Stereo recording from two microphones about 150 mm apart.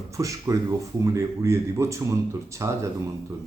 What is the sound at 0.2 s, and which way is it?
Speech, 20° right (ahead or behind).